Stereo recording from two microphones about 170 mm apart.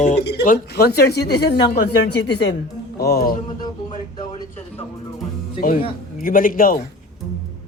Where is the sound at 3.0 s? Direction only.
65° left (ahead or behind).